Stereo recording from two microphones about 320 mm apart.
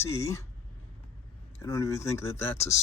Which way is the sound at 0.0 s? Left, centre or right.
Centre.